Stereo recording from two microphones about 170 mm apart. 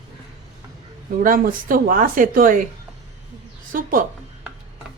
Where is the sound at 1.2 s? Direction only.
55° right (ahead or behind).